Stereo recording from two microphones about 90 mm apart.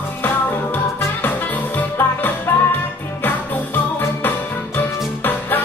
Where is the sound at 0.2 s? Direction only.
25° left (ahead or behind).